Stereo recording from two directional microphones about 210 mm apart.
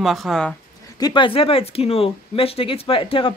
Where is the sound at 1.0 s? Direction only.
20° left (ahead or behind).